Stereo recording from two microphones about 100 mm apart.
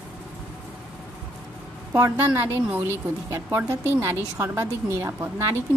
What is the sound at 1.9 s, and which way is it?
A woman's voice, 30° right (ahead or behind).